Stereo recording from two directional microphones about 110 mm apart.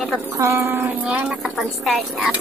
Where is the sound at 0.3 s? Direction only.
30° right (ahead or behind).